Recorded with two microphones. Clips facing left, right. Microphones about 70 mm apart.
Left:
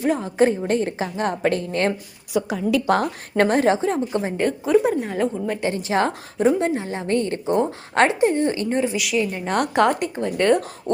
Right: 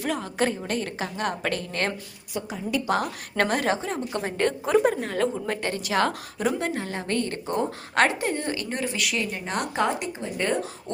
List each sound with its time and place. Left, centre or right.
0.0 s a woman's voice: left
2.3 s a woman's voice: left
2.8 s a woman's voice: left
3.3 s a woman's voice: left
4.1 s a woman's voice: centre
4.4 s a woman's voice: centre
5.0 s a woman's voice: centre
5.6 s a woman's voice: left
9.0 s a woman's voice: centre
9.7 s a woman's voice: left